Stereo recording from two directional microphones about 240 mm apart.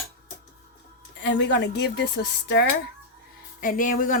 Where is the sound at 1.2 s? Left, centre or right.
Left.